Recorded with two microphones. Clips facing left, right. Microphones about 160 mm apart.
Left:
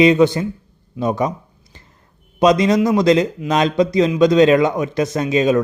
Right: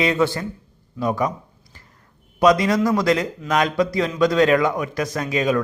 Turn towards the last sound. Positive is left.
turn(degrees=25)  # may be behind; listen again after turning